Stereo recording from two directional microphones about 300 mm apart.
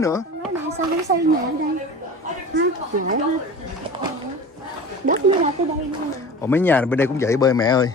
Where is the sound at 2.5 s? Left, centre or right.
Right.